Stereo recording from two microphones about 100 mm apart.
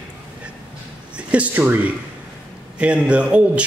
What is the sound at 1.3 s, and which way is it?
A man's voice, 15° right (ahead or behind).